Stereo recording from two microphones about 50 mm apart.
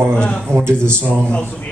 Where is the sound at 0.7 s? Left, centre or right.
Centre.